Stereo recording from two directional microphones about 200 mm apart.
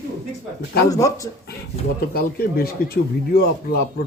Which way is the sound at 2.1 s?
50° left (ahead or behind).